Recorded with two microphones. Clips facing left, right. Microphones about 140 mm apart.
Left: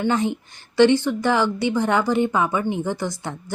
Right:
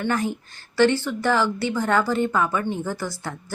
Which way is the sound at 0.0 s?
20° left (ahead or behind).